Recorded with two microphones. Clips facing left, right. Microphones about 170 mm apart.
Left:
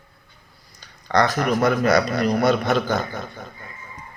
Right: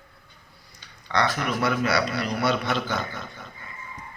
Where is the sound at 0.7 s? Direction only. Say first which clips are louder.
Left 6 dB; 40° left (ahead or behind).